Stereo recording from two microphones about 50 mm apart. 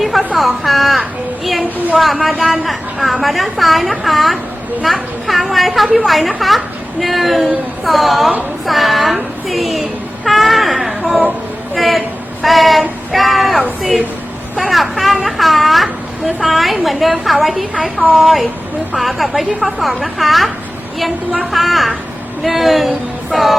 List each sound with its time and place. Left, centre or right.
0.0 s a sound: centre
0.3 s a woman's voice: centre
2.6 s a woman's voice: centre
11.0 s a sound: centre
11.7 s a woman's voice: centre
14.6 s a woman's voice: centre
21.5 s a woman's voice: centre